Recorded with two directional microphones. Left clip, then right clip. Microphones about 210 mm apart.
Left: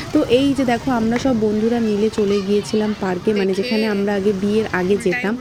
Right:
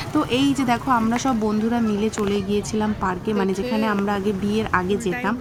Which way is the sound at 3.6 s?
25° right (ahead or behind).